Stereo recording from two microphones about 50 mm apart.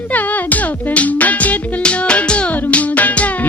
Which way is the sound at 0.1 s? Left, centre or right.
Left.